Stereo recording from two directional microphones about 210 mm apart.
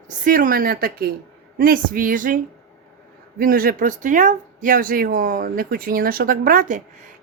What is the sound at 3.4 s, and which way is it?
A woman's voice, 45° right (ahead or behind).